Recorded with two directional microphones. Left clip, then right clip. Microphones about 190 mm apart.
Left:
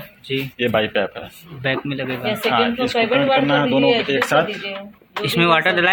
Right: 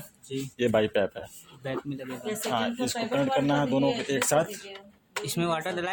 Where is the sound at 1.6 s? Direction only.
10° right (ahead or behind).